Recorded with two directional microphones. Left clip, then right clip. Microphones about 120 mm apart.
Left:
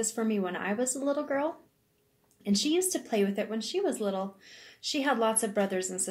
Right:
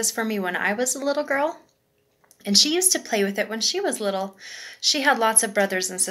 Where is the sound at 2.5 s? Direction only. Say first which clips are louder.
Right 9 dB; 20° left (ahead or behind).